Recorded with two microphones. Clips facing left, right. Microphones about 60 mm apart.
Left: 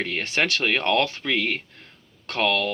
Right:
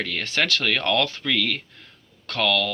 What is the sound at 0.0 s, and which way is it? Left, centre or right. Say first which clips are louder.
Speech: left 1 dB; left.